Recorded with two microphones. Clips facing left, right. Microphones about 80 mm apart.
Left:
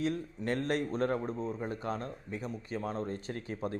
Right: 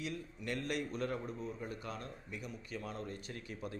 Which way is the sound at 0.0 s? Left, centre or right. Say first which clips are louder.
Left 9 dB; left.